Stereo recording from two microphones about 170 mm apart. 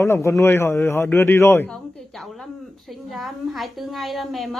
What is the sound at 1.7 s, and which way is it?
A woman's voice, 5° left (ahead or behind).